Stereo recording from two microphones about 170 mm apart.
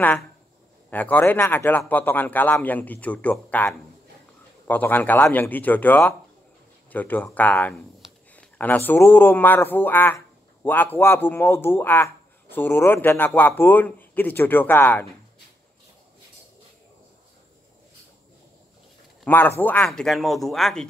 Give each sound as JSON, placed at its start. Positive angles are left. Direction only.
{"t": 0.8, "sound": "a man's voice", "side_deg": 10}
{"t": 19.2, "sound": "a man's voice", "side_deg": 10}